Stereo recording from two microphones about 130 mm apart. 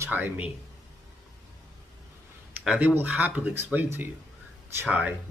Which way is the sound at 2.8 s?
10° right (ahead or behind).